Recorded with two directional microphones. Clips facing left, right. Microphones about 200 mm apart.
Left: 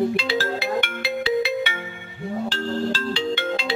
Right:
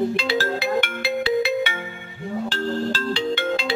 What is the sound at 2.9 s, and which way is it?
Ringtone, 45° right (ahead or behind).